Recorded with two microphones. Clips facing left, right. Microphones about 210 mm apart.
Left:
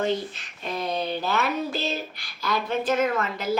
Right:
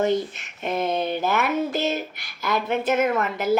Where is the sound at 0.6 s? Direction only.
20° right (ahead or behind).